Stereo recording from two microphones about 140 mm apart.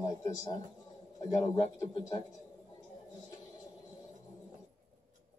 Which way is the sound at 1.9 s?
25° left (ahead or behind).